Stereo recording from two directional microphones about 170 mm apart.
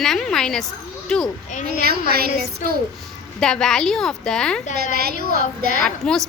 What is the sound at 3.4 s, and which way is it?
A woman's voice, 5° left (ahead or behind).